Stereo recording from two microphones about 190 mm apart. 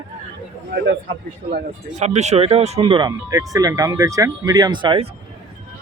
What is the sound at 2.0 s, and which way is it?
Speech, 35° right (ahead or behind).